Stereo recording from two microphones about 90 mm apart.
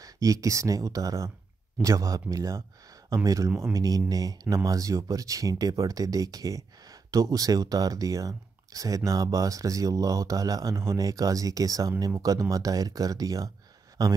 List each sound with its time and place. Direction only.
0.0 s speech: 40° right (ahead or behind)
3.8 s a man's voice: 40° right (ahead or behind)